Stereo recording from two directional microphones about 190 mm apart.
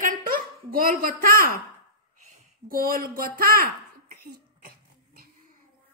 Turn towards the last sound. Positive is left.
turn(degrees=-50)  # may be behind; listen again after turning